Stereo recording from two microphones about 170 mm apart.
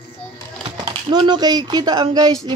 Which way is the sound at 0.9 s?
25° right (ahead or behind).